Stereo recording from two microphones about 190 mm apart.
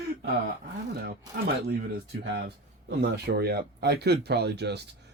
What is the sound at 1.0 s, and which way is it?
Speech, 55° right (ahead or behind).